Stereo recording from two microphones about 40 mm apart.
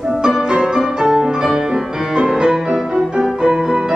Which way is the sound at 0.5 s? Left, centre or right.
Centre.